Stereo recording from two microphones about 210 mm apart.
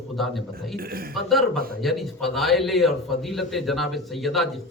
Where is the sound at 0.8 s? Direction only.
45° right (ahead or behind).